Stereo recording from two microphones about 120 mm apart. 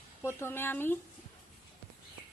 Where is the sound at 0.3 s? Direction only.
20° left (ahead or behind).